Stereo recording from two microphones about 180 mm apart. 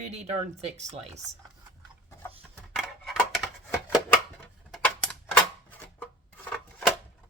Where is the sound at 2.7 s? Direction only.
Centre (ahead or behind).